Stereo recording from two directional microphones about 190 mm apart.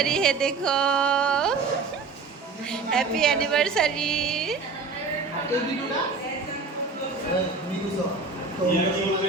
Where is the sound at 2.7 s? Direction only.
5° left (ahead or behind).